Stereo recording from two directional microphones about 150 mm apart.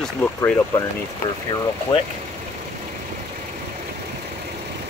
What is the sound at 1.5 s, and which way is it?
Speech, 30° left (ahead or behind).